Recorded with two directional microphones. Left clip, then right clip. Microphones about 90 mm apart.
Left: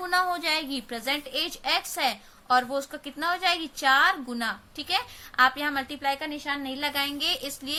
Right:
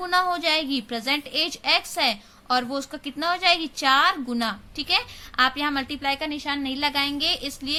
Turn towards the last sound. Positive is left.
turn(degrees=-25)  # may be behind; listen again after turning